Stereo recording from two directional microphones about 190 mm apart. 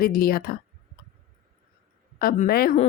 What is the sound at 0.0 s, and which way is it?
Speech, 50° left (ahead or behind).